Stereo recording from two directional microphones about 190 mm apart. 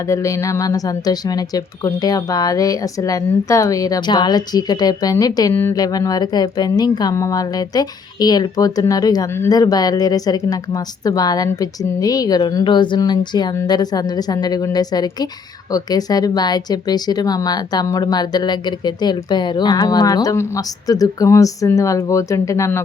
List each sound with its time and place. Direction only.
0.1 s a woman's voice: 15° left (ahead or behind)